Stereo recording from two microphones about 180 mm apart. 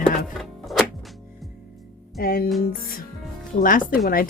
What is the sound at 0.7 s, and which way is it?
Music, centre (ahead or behind).